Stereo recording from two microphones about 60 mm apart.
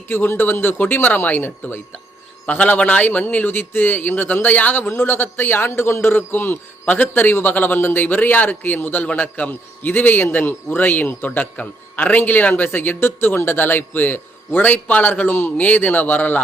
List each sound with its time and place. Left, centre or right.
0.1 s a man's voice: left